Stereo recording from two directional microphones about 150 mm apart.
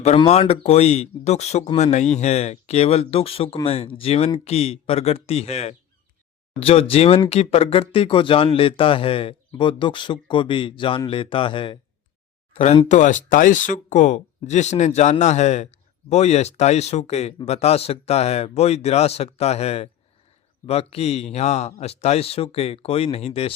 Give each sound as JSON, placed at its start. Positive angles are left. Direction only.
{"t": 0.3, "sound": "speech", "side_deg": 40}
{"t": 12.9, "sound": "speech", "side_deg": 55}